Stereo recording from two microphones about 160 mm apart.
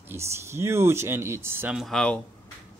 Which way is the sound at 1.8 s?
5° left (ahead or behind).